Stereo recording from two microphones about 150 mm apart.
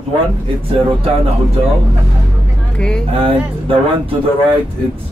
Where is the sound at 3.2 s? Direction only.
35° right (ahead or behind).